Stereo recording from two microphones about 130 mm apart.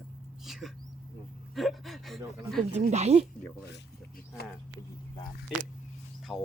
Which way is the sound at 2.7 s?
60° right (ahead or behind).